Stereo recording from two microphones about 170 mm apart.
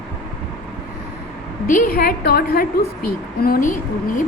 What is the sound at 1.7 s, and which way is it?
A woman's voice, 60° left (ahead or behind).